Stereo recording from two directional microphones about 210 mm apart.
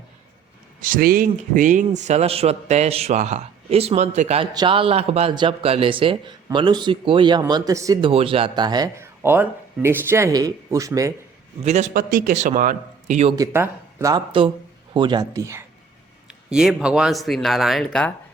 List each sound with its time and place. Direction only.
0.8 s a man's voice: 40° right (ahead or behind); by 8.1 s 15° right (ahead or behind)
8.1 s speech: 25° right (ahead or behind)
11.6 s a man's voice: 35° right (ahead or behind)
13.3 s speech: 15° right (ahead or behind)
16.5 s speech: 5° right (ahead or behind)